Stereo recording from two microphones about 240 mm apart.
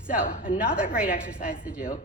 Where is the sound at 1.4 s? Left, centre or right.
Centre.